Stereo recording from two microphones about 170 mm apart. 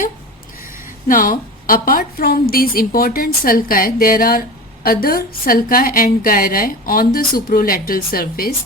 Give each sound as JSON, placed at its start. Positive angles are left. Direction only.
{"t": 1.0, "sound": "a woman's voice", "side_deg": 55}